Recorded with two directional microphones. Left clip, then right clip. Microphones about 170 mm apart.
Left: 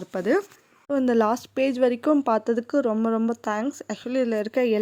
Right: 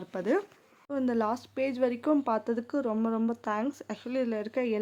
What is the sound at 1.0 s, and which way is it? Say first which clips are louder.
Speech: left 8 dB; 40° left (ahead or behind).